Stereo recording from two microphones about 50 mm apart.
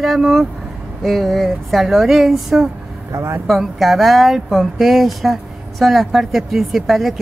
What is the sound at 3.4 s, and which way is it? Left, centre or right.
Speech, centre.